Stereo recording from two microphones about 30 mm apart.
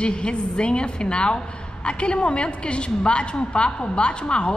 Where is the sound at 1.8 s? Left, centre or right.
Left.